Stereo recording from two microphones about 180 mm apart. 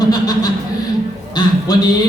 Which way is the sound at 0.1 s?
20° left (ahead or behind).